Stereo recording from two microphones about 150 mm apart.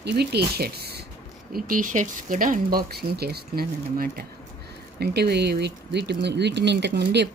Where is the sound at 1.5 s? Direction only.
75° right (ahead or behind).